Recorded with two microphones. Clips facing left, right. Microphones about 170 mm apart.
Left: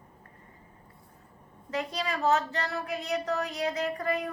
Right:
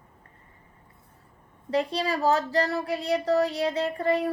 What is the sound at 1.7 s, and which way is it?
A woman's voice, 30° right (ahead or behind).